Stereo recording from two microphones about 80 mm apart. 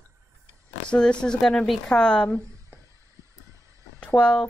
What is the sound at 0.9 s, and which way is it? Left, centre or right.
Speech, centre.